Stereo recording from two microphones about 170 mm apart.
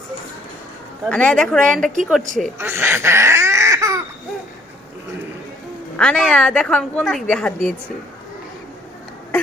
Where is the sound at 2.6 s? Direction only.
15° right (ahead or behind).